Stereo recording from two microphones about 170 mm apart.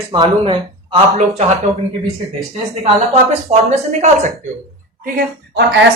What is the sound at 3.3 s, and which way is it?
Speech, 40° right (ahead or behind).